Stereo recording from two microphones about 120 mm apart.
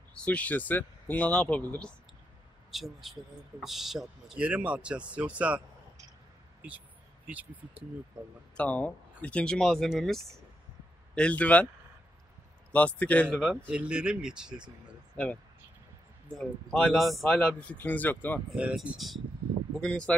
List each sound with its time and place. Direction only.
0.2 s speech: 10° left (ahead or behind)
2.7 s speech: centre (ahead or behind)
7.2 s speech: 10° right (ahead or behind)
8.5 s speech: 10° left (ahead or behind)
12.7 s speech: 10° left (ahead or behind)
13.7 s speech: 10° right (ahead or behind)
16.3 s speech: 5° left (ahead or behind)
18.6 s speech: 10° right (ahead or behind); by 20.2 s 10° left (ahead or behind)